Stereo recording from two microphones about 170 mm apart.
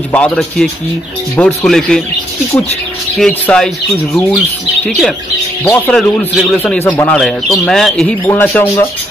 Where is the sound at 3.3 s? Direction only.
5° left (ahead or behind).